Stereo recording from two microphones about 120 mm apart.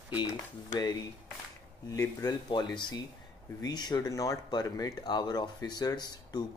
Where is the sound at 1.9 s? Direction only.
30° left (ahead or behind).